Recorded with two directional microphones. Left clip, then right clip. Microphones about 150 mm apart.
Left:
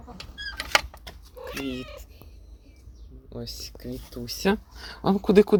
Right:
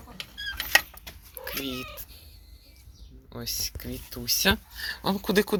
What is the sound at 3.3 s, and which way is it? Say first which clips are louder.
Speech: right 5 dB; 10° left (ahead or behind).